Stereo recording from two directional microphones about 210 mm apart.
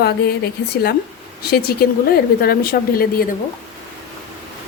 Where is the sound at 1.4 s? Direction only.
45° left (ahead or behind).